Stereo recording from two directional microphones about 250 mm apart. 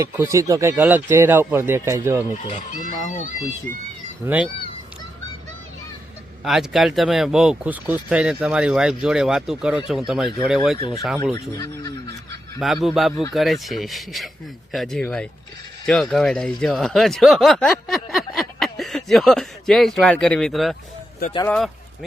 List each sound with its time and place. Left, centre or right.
0.0 s speech: centre
2.3 s chicken: left
4.2 s speech: centre
6.4 s speech: centre
10.8 s speech: centre
12.5 s speech: centre